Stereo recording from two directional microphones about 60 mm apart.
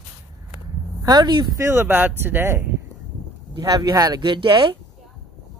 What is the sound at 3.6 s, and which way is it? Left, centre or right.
Speech, right.